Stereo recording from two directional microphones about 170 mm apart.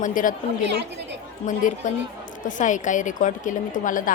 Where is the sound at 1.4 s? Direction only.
50° left (ahead or behind).